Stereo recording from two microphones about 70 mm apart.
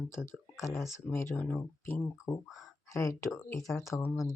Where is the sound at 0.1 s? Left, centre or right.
Left.